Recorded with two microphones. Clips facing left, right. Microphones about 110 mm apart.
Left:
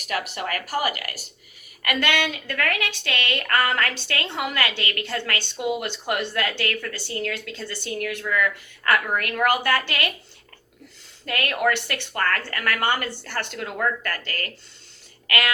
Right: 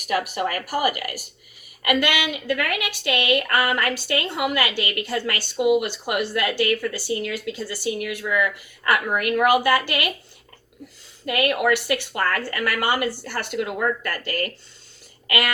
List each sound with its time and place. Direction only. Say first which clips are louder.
0.0 s speech: right 5 dB; 45° right (ahead or behind)
1.8 s a woman's voice: right 2 dB; 10° right (ahead or behind)
11.3 s a woman's voice: right 3 dB; 10° right (ahead or behind)